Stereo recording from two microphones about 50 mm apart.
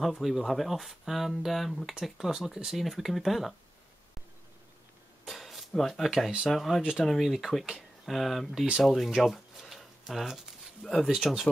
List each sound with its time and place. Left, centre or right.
0.0 s speech: centre
5.3 s a sound: centre
6.0 s speech: centre
6.8 s speech: centre
7.1 s speech: centre
7.6 s a sound: centre
8.1 s speech: centre
9.1 s a sound: centre
10.8 s speech: centre
11.1 s speech: centre